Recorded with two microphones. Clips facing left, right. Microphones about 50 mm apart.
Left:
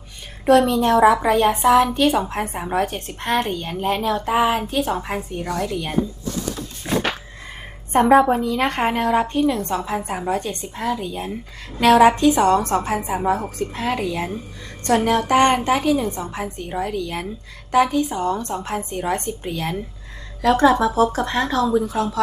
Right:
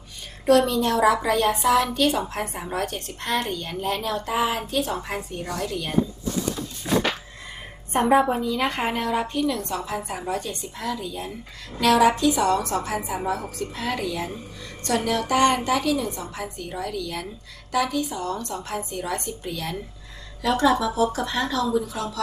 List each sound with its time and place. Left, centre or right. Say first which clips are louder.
0.4 s a woman's voice: left 4 dB; left
8.3 s a woman's voice: left 4 dB; left